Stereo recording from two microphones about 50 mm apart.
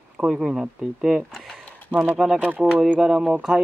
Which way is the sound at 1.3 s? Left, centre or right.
Centre.